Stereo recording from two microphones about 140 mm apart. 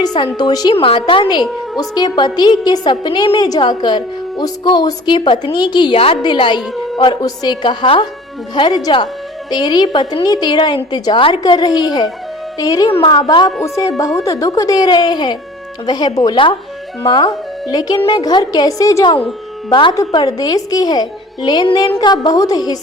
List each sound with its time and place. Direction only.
0.0 s a woman's voice: 30° left (ahead or behind)
0.7 s a woman's voice: 40° left (ahead or behind); by 19.1 s 25° left (ahead or behind)
20.1 s a woman's voice: 25° left (ahead or behind)